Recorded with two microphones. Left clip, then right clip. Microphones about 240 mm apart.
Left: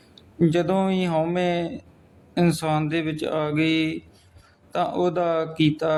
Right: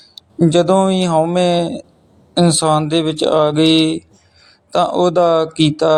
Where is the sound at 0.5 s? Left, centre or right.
Right.